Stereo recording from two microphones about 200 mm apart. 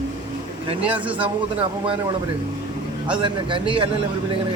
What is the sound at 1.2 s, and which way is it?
Speech, 25° right (ahead or behind).